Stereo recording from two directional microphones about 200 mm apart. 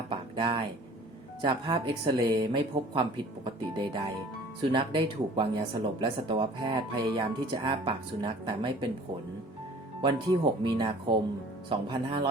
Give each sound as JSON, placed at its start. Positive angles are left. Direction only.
{"t": 0.1, "sound": "a sound", "side_deg": -25}
{"t": 1.4, "sound": "speech", "side_deg": -20}
{"t": 10.0, "sound": "speech", "side_deg": -25}